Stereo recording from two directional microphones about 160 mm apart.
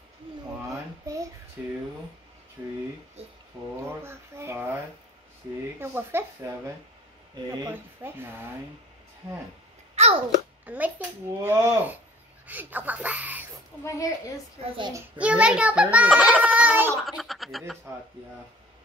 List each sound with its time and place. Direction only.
1.6 s a child's voice: 10° right (ahead or behind)
3.2 s speech: 40° right (ahead or behind)
3.8 s a child's voice: 15° right (ahead or behind)
5.8 s a child's voice: 15° right (ahead or behind)
10.0 s babbling: 40° right (ahead or behind)
10.6 s a child's voice: 10° right (ahead or behind)
13.8 s a woman's voice: 20° left (ahead or behind)
14.8 s a child's voice: 20° right (ahead or behind)
15.1 s a child's voice: 10° right (ahead or behind)
17.0 s speech: centre (ahead or behind)